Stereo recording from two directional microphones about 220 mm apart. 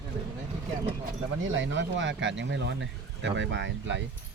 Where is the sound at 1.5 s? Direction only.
55° right (ahead or behind).